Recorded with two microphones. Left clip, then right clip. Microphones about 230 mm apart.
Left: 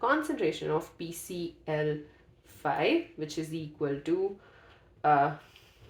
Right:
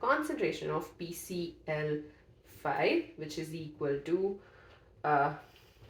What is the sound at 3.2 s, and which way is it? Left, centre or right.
Speech, left.